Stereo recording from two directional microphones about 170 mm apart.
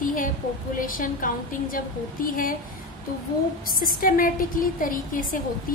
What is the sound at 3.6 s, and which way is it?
A woman's voice, 55° left (ahead or behind).